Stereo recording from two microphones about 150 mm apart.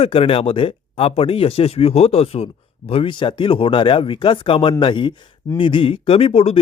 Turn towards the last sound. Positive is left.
turn(degrees=40)  # may be behind; listen again after turning